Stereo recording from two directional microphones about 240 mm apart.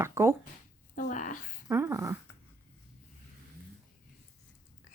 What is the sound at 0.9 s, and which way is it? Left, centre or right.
Speech, left.